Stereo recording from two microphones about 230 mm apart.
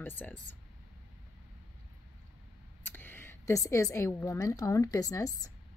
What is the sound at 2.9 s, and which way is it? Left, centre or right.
A woman's voice, centre.